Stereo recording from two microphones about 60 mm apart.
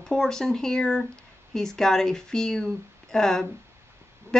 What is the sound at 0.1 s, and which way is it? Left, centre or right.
A woman's voice, centre.